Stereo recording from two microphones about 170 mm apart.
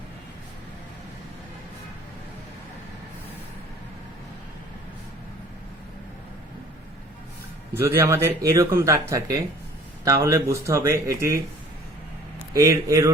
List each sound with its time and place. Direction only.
7.7 s speech: 15° right (ahead or behind)
12.5 s speech: 20° right (ahead or behind)